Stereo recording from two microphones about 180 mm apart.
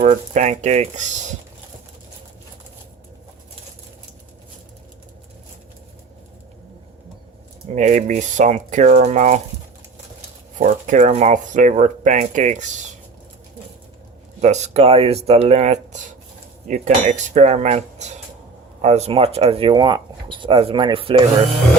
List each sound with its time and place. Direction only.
0.0 s speech: 40° right (ahead or behind)
7.7 s speech: 40° right (ahead or behind)
10.6 s speech: 45° right (ahead or behind)
14.4 s speech: 40° right (ahead or behind)